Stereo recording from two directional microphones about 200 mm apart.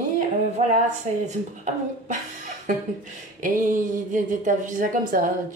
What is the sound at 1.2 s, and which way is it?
A woman's voice, 40° right (ahead or behind).